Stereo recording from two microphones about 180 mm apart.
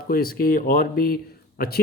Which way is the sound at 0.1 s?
55° left (ahead or behind).